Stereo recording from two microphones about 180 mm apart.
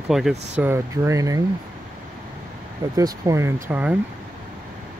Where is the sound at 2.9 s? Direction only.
20° right (ahead or behind).